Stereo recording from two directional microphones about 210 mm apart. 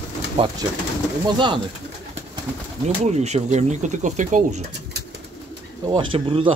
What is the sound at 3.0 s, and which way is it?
Speech, 30° right (ahead or behind).